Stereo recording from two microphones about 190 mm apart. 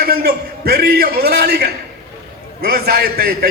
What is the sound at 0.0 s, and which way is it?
A man's voice, 55° right (ahead or behind).